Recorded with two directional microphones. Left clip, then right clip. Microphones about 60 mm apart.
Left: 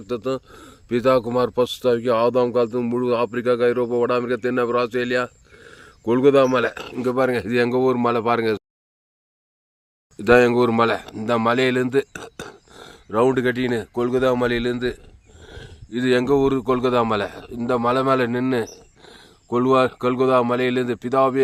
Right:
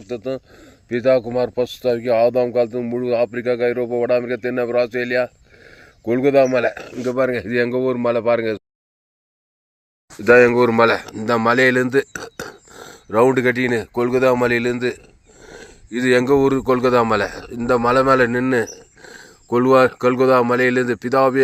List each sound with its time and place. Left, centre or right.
0.1 s speech: left
0.3 s speech: left
0.9 s speech: left
1.9 s speech: left
10.8 s speech: centre
11.4 s a man's voice: centre
18.5 s cricket: centre
19.2 s a man's voice: centre